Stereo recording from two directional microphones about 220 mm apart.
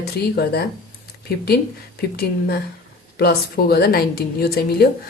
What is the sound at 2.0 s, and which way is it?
A woman's voice, 45° left (ahead or behind).